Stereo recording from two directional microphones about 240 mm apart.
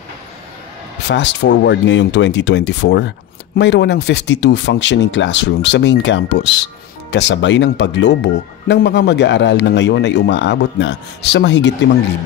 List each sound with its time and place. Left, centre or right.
1.0 s speech: left